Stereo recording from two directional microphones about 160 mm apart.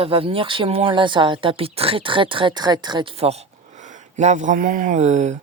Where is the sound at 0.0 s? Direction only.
35° right (ahead or behind).